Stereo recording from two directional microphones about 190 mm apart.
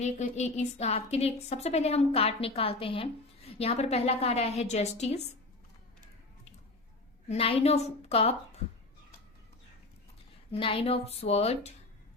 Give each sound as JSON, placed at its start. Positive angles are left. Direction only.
{"t": 0.0, "sound": "a woman's voice", "side_deg": 35}
{"t": 7.3, "sound": "a woman's voice", "side_deg": 30}
{"t": 10.5, "sound": "a woman's voice", "side_deg": 30}